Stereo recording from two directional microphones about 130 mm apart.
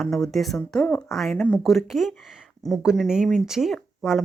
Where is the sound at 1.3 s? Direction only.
10° left (ahead or behind).